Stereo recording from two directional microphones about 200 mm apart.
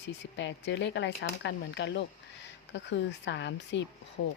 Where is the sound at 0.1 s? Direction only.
65° left (ahead or behind).